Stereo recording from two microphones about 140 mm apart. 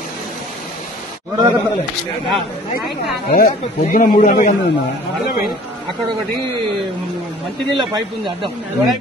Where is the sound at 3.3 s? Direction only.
65° left (ahead or behind); by 4.5 s 85° left.